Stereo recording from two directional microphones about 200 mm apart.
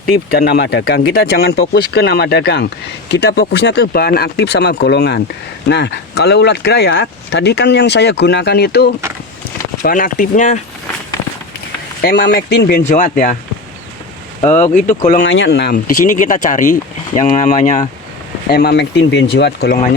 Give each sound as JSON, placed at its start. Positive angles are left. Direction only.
{"t": 0.3, "sound": "speech", "side_deg": 50}
{"t": 9.8, "sound": "speech", "side_deg": 40}
{"t": 12.0, "sound": "speech", "side_deg": 55}
{"t": 12.9, "sound": "speech", "side_deg": 40}
{"t": 14.6, "sound": "speech", "side_deg": 35}
{"t": 15.2, "sound": "speech", "side_deg": 60}
{"t": 15.7, "sound": "speech", "side_deg": 40}